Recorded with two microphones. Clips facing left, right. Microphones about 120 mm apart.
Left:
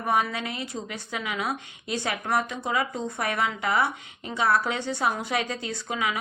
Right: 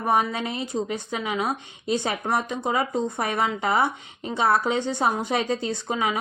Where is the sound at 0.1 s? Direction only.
25° right (ahead or behind).